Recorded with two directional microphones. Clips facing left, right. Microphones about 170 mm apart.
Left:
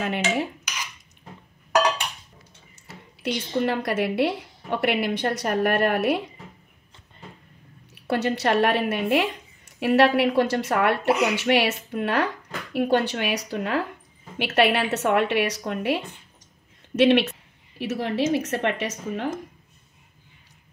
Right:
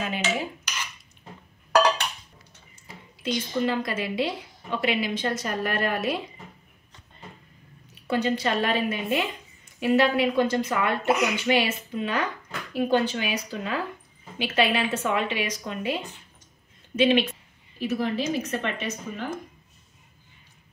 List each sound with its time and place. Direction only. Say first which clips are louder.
0.0 s speech: left 3 dB; 60° left (ahead or behind)
2.9 s speech: left 1 dB; 70° left (ahead or behind)
7.9 s a woman's voice: left 1 dB; 70° left (ahead or behind)